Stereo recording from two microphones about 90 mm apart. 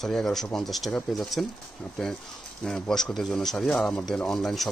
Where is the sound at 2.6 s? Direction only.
5° left (ahead or behind).